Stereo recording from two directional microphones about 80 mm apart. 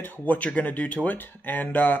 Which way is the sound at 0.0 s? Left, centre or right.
Left.